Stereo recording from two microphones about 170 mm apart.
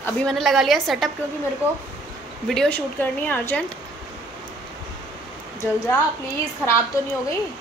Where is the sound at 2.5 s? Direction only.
5° left (ahead or behind).